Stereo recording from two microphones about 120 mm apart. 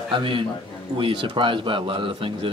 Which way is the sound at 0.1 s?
45° right (ahead or behind).